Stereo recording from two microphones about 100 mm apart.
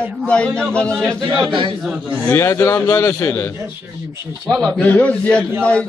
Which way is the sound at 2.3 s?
30° left (ahead or behind).